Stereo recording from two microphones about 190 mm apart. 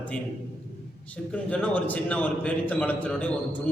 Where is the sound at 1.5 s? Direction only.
5° left (ahead or behind).